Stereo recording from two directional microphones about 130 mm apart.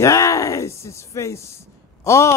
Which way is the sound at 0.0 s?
25° left (ahead or behind).